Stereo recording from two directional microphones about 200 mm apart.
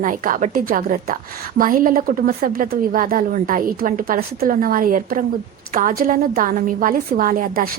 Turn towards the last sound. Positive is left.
turn(degrees=-45)  # may be behind; listen again after turning